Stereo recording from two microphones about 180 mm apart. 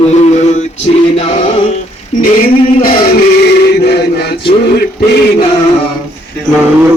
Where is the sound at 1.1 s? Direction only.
35° left (ahead or behind).